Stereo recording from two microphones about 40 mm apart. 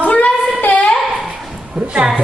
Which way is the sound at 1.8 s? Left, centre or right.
Right.